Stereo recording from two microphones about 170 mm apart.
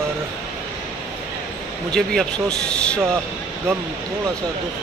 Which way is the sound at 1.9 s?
5° left (ahead or behind).